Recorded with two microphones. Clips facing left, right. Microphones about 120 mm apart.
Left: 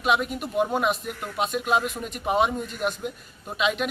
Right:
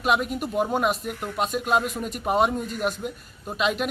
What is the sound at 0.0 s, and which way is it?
A man's voice, centre (ahead or behind).